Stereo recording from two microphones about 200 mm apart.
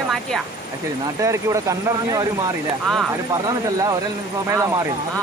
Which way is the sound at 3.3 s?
20° right (ahead or behind).